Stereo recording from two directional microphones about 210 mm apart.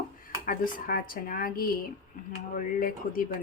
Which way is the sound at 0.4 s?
40° left (ahead or behind).